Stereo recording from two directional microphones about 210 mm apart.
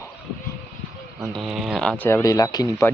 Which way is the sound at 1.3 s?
Centre (ahead or behind).